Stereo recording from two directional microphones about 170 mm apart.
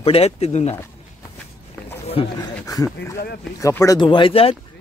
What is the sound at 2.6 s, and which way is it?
Speech, 20° left (ahead or behind).